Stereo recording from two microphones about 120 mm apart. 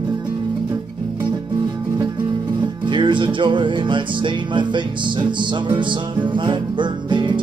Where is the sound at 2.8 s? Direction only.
40° right (ahead or behind).